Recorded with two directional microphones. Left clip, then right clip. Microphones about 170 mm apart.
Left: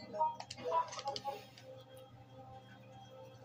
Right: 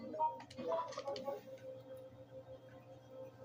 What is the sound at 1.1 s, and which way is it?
Tick-tock, 45° right (ahead or behind).